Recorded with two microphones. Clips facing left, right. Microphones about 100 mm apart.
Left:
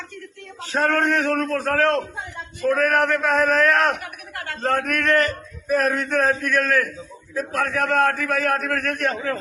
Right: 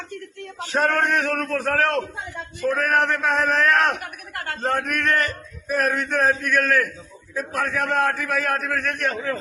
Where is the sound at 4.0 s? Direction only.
45° right (ahead or behind).